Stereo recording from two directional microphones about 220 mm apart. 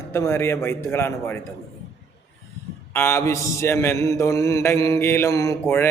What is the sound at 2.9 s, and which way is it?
Mantra, 10° left (ahead or behind).